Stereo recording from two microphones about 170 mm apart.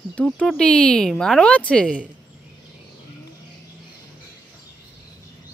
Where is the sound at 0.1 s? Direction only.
5° left (ahead or behind).